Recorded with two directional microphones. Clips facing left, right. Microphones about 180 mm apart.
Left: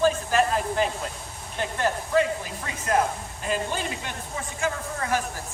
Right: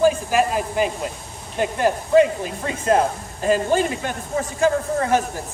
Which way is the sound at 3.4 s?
45° right (ahead or behind).